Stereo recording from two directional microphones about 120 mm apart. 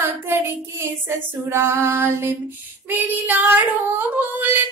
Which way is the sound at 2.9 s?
15° right (ahead or behind).